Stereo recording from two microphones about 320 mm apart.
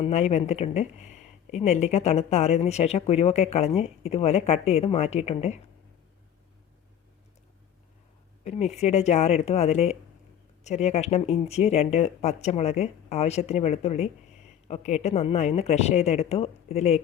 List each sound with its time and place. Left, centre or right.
0.0 s speech: left
8.4 s speech: left